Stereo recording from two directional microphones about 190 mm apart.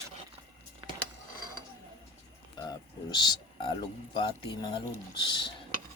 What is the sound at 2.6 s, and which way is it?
Bird, 20° left (ahead or behind).